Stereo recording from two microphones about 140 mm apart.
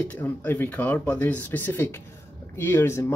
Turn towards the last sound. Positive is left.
turn(degrees=15)  # may be behind; listen again after turning